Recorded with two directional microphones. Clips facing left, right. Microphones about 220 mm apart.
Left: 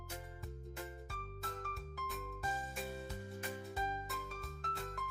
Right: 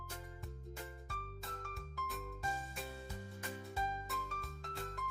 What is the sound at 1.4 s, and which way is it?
Music, centre (ahead or behind).